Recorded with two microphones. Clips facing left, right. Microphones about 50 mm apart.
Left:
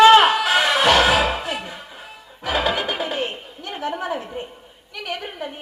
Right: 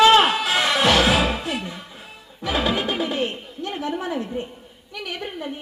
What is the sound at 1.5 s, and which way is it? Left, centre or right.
Speech, centre.